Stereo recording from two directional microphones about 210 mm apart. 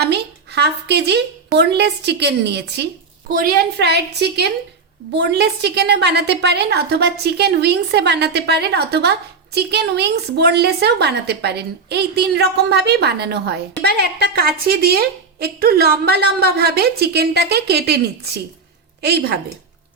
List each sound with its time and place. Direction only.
0.0 s a woman's voice: 50° right (ahead or behind)